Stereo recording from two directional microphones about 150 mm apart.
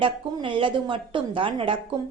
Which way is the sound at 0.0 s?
35° right (ahead or behind).